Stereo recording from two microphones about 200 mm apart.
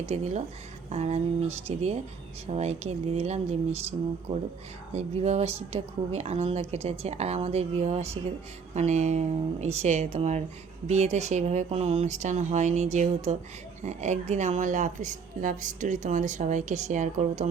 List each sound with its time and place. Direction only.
0.0 s speech: 35° right (ahead or behind)
4.9 s speech: 35° right (ahead or behind)